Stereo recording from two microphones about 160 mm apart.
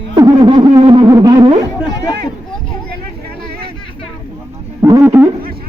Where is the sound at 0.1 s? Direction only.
25° right (ahead or behind).